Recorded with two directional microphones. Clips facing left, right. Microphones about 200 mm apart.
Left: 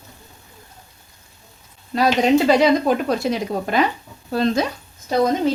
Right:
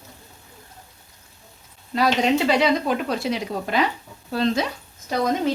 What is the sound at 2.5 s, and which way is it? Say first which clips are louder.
Speech: left 5 dB; 45° left (ahead or behind).